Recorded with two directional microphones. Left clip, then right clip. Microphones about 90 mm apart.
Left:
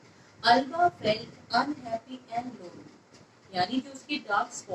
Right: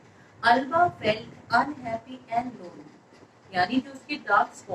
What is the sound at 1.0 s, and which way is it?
Speech, 30° right (ahead or behind).